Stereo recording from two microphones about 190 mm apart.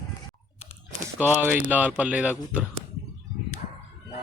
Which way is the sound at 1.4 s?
10° right (ahead or behind).